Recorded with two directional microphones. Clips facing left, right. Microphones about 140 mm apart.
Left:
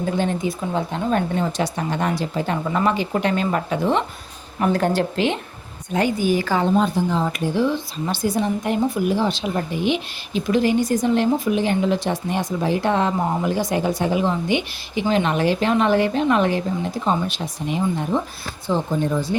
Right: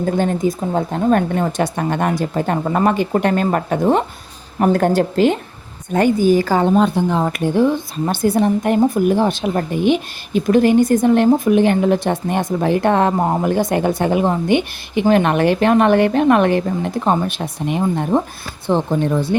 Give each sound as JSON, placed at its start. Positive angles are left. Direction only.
{"t": 0.0, "sound": "speech", "side_deg": -45}
{"t": 6.7, "sound": "speech", "side_deg": -65}